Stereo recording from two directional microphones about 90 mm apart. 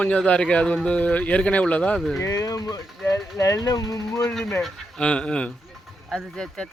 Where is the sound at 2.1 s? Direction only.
35° left (ahead or behind).